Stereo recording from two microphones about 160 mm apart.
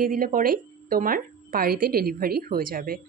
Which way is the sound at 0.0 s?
55° right (ahead or behind).